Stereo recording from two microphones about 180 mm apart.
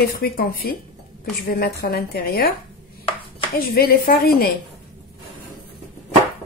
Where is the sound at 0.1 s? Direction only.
55° left (ahead or behind).